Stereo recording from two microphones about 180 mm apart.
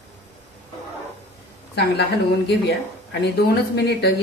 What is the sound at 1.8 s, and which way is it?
A woman's voice, 65° left (ahead or behind).